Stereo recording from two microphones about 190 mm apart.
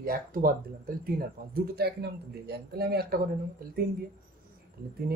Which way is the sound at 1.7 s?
60° right (ahead or behind).